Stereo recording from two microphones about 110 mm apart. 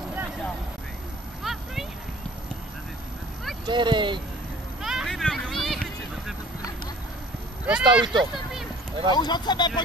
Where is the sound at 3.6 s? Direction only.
45° right (ahead or behind).